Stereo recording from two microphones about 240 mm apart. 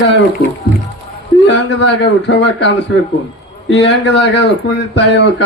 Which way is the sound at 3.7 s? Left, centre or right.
Left.